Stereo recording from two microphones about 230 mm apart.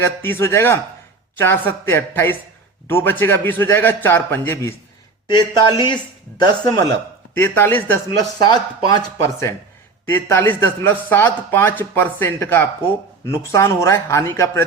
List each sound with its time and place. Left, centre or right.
0.0 s a man's voice: centre